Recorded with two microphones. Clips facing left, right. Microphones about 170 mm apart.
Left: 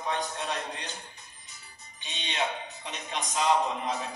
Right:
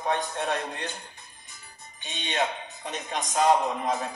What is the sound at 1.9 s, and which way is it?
Speech, 50° right (ahead or behind).